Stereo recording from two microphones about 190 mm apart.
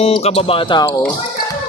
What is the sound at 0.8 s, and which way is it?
Speech, 15° left (ahead or behind).